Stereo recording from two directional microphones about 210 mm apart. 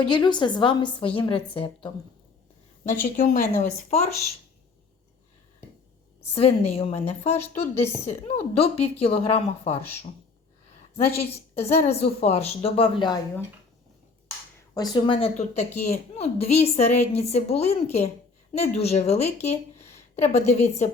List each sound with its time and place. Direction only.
0.0 s a woman's voice: 20° left (ahead or behind)
2.8 s a woman's voice: 40° left (ahead or behind)
6.3 s a woman's voice: 30° left (ahead or behind)
11.2 s a woman's voice: 30° left (ahead or behind)
14.9 s a woman's voice: 25° left (ahead or behind)